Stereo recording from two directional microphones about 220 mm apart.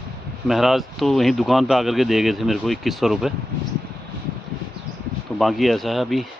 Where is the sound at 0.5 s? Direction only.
Centre (ahead or behind).